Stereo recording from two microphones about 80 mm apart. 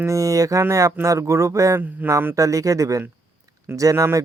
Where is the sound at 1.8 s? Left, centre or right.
Right.